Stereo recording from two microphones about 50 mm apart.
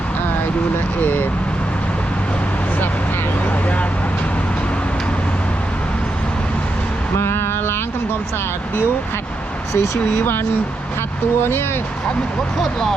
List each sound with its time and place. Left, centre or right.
3.4 s speech: left
7.2 s vehicle: left
9.7 s speech: left